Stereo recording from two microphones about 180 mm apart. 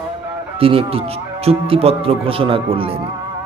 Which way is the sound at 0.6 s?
30° right (ahead or behind).